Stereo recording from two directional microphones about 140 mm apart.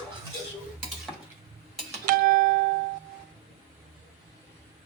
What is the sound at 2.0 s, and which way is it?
Music, 90° right.